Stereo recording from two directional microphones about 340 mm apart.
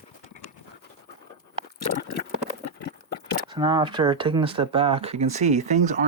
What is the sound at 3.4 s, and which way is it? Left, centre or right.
Speech, centre.